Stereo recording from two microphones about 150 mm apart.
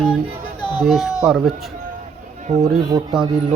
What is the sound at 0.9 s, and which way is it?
Speech, centre (ahead or behind).